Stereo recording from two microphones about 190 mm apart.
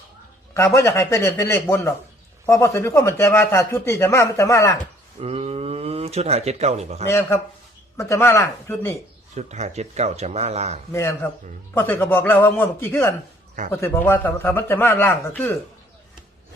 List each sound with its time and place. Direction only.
0.5 s speech: 15° left (ahead or behind)
5.2 s speech: 30° right (ahead or behind)
7.1 s speech: 15° left (ahead or behind)
9.3 s speech: 35° right (ahead or behind)
10.9 s speech: 15° left (ahead or behind)